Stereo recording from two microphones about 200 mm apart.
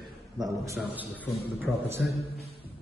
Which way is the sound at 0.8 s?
10° right (ahead or behind).